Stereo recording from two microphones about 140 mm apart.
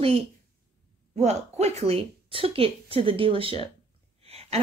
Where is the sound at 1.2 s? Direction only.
50° right (ahead or behind).